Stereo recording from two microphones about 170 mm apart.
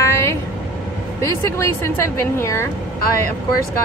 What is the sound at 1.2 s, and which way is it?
A woman's voice, 15° left (ahead or behind).